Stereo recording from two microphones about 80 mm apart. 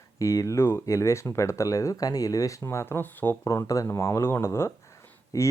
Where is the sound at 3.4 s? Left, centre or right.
Left.